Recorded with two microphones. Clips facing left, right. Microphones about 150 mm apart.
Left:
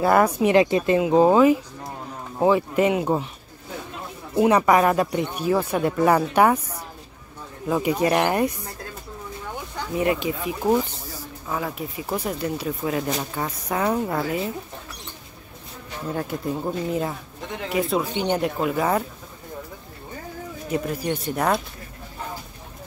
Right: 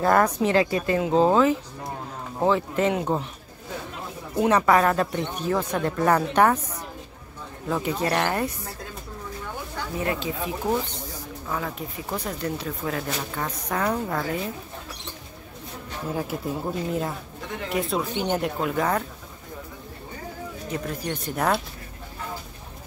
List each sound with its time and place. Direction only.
0.0 s speech: 10° left (ahead or behind)
4.4 s speech: 10° left (ahead or behind)
9.9 s speech: 15° left (ahead or behind)
16.2 s speech: 5° right (ahead or behind)
20.7 s speech: 5° left (ahead or behind)